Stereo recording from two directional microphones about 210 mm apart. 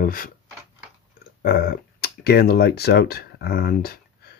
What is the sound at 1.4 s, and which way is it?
Speech, 45° left (ahead or behind).